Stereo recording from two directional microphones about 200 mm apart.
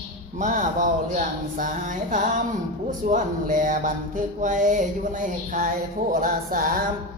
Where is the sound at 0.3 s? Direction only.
40° right (ahead or behind).